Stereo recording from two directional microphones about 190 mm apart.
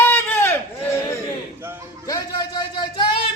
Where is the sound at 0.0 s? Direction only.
10° left (ahead or behind).